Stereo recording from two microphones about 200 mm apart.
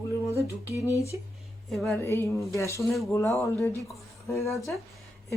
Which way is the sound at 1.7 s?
Centre (ahead or behind).